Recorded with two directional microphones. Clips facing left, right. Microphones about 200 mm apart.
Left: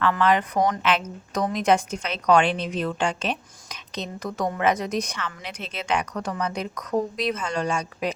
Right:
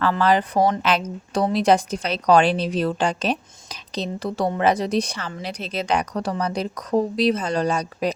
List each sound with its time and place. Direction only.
0.0 s speech: 35° right (ahead or behind)